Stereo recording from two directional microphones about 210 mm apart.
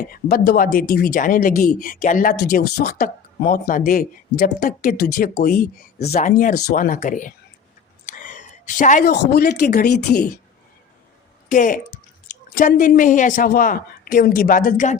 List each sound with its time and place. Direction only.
0.1 s speech: 50° left (ahead or behind)
8.0 s a sound: 40° left (ahead or behind)
9.1 s speech: 50° left (ahead or behind)
11.4 s a woman's voice: 40° left (ahead or behind)